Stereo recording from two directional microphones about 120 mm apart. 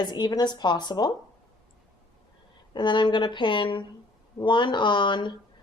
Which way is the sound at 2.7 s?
40° left (ahead or behind).